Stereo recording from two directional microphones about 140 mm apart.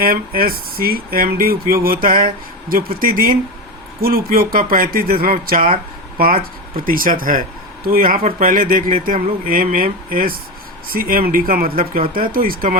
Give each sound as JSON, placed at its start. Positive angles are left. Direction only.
{"t": 0.0, "sound": "speech", "side_deg": -90}